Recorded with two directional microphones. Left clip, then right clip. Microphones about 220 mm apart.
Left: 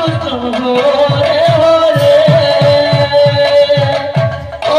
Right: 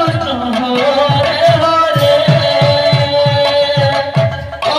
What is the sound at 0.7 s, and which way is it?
Music, 40° right (ahead or behind).